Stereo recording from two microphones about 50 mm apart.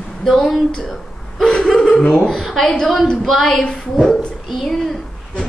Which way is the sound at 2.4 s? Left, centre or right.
Centre.